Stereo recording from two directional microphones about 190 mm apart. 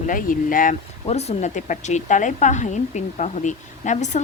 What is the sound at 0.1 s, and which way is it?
Speech, 45° left (ahead or behind).